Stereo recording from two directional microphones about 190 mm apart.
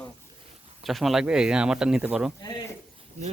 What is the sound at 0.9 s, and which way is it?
Speech, centre (ahead or behind).